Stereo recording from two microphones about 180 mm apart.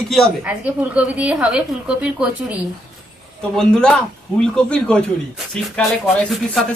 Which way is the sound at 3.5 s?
5° left (ahead or behind).